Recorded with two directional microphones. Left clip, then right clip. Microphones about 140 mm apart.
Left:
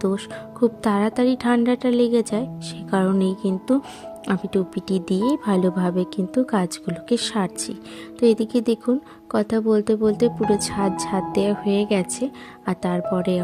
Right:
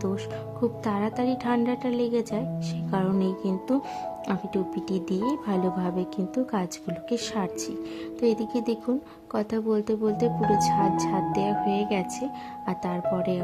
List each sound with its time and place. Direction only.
0.6 s a woman's voice: 35° left (ahead or behind)